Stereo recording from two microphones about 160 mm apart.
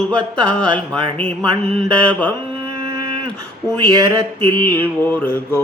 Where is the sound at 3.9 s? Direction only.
25° right (ahead or behind).